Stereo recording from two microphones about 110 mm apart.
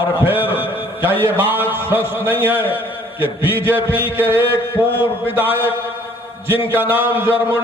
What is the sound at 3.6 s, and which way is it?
Mantra, 15° right (ahead or behind).